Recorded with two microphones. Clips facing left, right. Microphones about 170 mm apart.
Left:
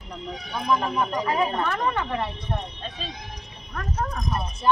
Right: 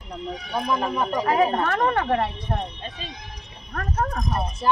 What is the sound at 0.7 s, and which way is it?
Speech, 30° right (ahead or behind).